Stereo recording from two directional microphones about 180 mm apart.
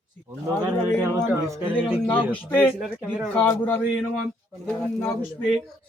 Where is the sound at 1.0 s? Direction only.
15° right (ahead or behind).